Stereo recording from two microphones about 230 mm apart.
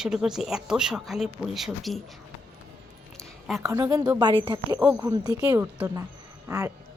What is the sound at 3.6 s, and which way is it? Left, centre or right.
A woman's voice, centre.